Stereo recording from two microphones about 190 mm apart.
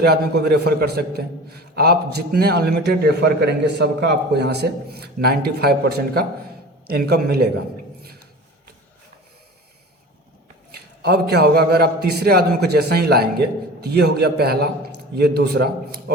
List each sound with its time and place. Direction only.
0.1 s a man's voice: 60° right (ahead or behind)
10.7 s a man's voice: 55° right (ahead or behind)